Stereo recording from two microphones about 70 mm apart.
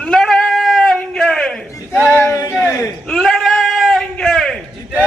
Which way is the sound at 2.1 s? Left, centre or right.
Left.